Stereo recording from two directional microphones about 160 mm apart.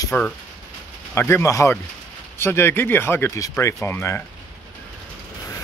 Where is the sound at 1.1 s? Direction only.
15° left (ahead or behind).